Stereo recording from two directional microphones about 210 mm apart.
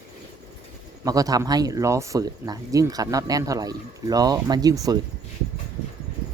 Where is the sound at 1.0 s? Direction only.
15° right (ahead or behind).